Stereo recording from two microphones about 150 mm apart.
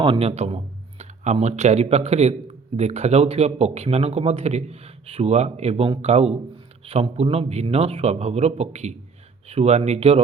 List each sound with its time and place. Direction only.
0.0 s speech: 40° right (ahead or behind)